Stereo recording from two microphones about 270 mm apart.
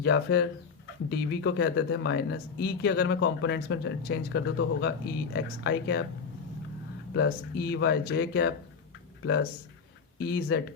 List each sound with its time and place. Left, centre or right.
0.0 s speech: left
7.1 s speech: left